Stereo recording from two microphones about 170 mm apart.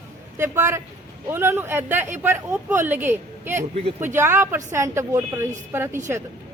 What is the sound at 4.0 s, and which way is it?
Speech, 15° right (ahead or behind).